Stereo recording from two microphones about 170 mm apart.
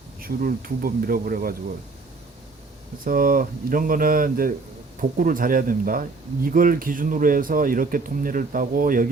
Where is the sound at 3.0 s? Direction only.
55° right (ahead or behind).